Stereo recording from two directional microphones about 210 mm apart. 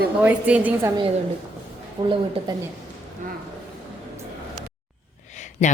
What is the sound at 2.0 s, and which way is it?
Speech, 20° right (ahead or behind).